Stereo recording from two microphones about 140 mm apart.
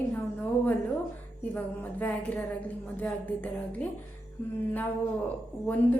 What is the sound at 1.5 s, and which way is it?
Speech, 15° left (ahead or behind).